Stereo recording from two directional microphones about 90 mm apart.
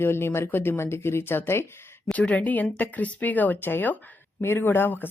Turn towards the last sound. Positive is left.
turn(degrees=20)  # may be behind; listen again after turning